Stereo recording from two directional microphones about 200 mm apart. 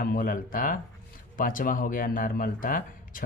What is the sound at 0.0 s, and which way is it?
Speech, 45° left (ahead or behind).